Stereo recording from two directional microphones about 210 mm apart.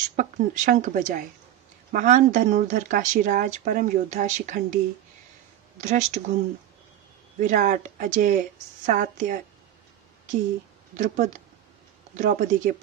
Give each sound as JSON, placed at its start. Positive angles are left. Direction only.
{"t": 0.1, "sound": "speech", "side_deg": -40}
{"t": 5.8, "sound": "speech", "side_deg": -35}
{"t": 7.3, "sound": "speech", "side_deg": -40}
{"t": 11.0, "sound": "speech", "side_deg": -35}